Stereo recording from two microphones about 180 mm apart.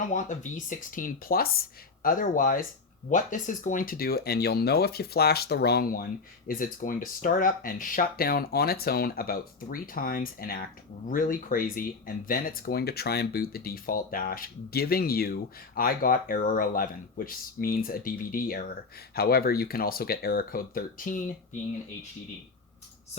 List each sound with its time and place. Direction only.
0.1 s speech: 45° left (ahead or behind)